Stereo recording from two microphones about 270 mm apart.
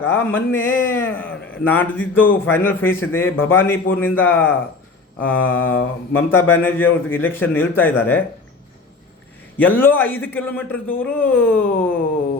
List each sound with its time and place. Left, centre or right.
0.0 s a man's voice: centre
5.2 s a sound: left
6.1 s a man's voice: centre
9.6 s a man's voice: centre